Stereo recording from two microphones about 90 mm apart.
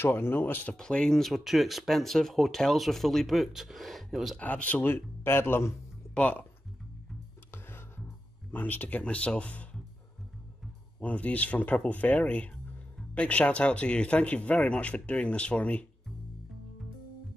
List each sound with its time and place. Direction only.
0.0 s speech: 25° left (ahead or behind)
0.7 s speech: 10° left (ahead or behind)
4.4 s speech: 15° left (ahead or behind)
6.1 s speech: 15° left (ahead or behind)
7.5 s music: 25° left (ahead or behind)
8.5 s speech: 20° left (ahead or behind)
11.0 s speech: 15° left (ahead or behind)